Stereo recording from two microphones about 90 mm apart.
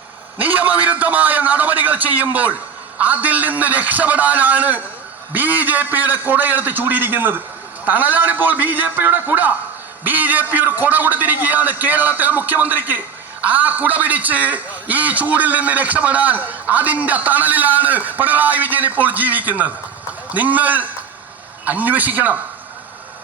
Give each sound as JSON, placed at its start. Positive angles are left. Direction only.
{"t": 0.3, "sound": "a man's voice", "side_deg": -20}